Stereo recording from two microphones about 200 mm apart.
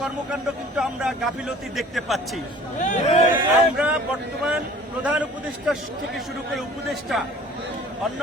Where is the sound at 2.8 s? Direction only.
35° left (ahead or behind).